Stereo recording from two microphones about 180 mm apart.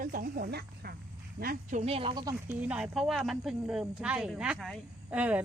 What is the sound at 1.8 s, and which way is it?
Speech, 35° right (ahead or behind).